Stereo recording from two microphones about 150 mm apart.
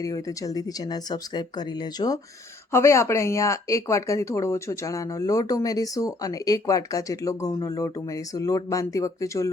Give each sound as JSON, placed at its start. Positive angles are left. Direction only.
{"t": 0.0, "sound": "speech", "side_deg": 25}